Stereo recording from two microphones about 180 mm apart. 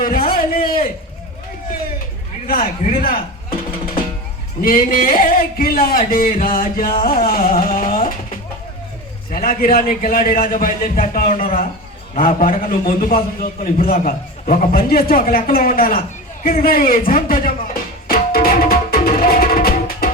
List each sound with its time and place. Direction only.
0.0 s a sound: 55° left (ahead or behind)
2.5 s a man's voice: 55° left (ahead or behind)
4.6 s a man's voice: 50° left (ahead or behind)
9.3 s a man's voice: 55° left (ahead or behind)
13.1 s a man's voice: 45° left (ahead or behind)
18.1 s music: 55° left (ahead or behind)